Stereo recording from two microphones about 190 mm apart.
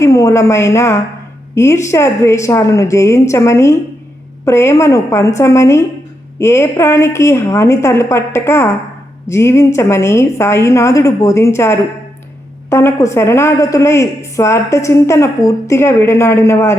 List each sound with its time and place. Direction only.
0.0 s a woman's voice: 15° left (ahead or behind)